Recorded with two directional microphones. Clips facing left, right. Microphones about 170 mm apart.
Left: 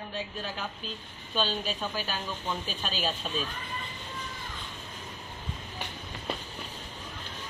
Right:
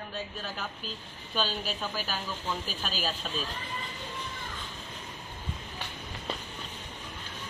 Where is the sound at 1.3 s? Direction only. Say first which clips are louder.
Left 2 dB; 5° right (ahead or behind).